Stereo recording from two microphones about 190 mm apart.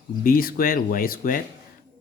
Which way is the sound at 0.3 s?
50° left (ahead or behind).